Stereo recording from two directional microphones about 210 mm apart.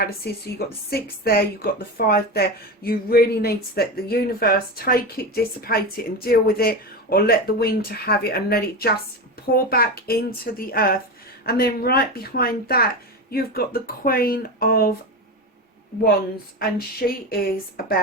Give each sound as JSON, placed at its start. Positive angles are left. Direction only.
{"t": 0.9, "sound": "a woman's voice", "side_deg": 45}
{"t": 16.6, "sound": "a woman's voice", "side_deg": 45}